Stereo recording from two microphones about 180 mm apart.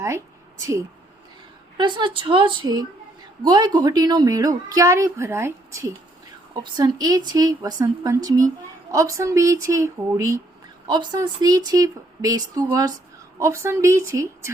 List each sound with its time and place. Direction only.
1.8 s a woman's voice: 25° right (ahead or behind)